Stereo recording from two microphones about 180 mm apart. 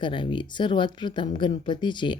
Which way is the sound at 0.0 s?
25° left (ahead or behind).